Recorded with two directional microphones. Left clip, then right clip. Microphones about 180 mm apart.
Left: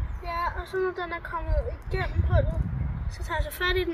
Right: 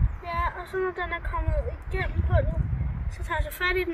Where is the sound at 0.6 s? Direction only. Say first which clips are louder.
Even; 5° left (ahead or behind).